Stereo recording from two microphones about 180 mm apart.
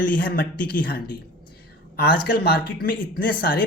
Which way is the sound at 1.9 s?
60° left (ahead or behind).